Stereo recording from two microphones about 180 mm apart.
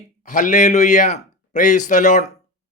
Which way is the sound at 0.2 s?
45° left (ahead or behind).